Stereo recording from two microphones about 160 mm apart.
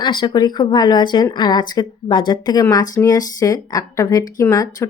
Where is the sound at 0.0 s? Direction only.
30° left (ahead or behind).